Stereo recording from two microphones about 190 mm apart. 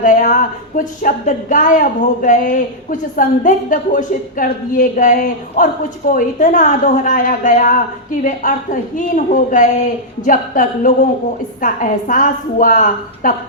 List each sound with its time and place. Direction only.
0.0 s speech: 45° left (ahead or behind)